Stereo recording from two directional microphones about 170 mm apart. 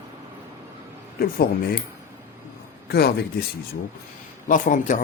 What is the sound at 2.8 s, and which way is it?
Speech, 70° left (ahead or behind).